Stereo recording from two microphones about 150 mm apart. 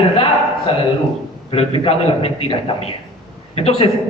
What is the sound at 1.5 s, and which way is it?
A man's voice, 40° left (ahead or behind).